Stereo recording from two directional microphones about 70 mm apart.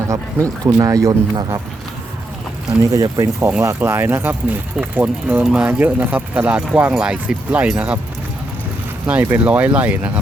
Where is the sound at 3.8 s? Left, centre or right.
Right.